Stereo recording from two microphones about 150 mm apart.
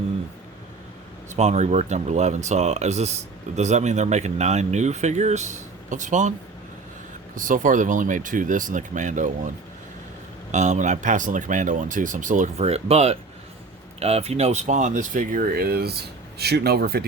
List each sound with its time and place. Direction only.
1.3 s speech: 50° right (ahead or behind)
7.3 s speech: 60° right (ahead or behind)
10.5 s speech: 50° right (ahead or behind); by 17.1 s 90° right